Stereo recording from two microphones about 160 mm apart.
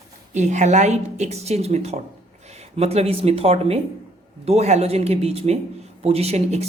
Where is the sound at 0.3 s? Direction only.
50° right (ahead or behind).